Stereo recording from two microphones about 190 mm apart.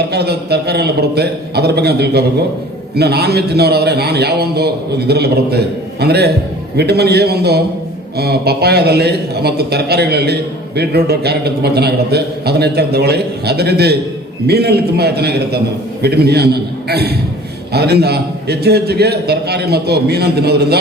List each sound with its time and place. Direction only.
0.1 s a man's voice: 60° right (ahead or behind)